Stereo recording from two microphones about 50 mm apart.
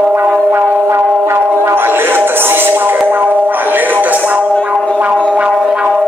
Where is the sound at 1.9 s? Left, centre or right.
Right.